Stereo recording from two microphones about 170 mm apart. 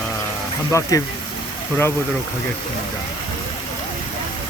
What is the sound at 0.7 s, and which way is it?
Speech, 20° left (ahead or behind).